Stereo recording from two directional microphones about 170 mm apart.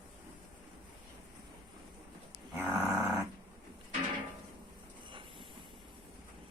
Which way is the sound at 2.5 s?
10° right (ahead or behind).